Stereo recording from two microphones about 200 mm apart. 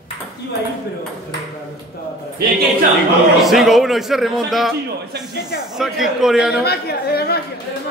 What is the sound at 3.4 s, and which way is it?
A man's voice, centre (ahead or behind).